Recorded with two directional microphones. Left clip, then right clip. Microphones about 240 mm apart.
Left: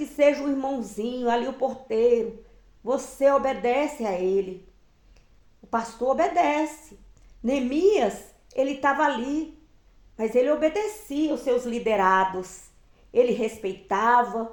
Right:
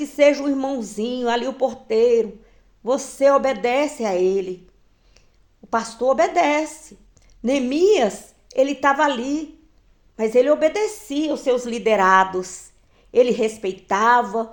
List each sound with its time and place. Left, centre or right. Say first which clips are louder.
0.0 s speech: right 5 dB; right
5.7 s speech: right 5 dB; right